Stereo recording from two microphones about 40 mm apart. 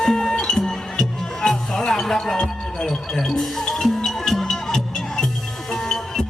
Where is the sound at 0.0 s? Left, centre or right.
Centre.